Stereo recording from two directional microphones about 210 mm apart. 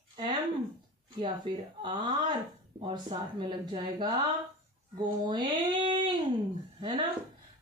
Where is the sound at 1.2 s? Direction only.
20° right (ahead or behind).